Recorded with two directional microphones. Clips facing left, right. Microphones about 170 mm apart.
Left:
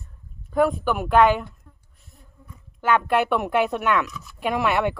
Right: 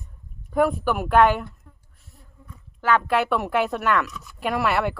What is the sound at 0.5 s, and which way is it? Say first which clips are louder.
Speech: even; 10° right (ahead or behind).